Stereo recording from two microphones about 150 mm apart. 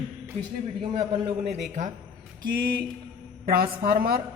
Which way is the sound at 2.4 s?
75° right (ahead or behind).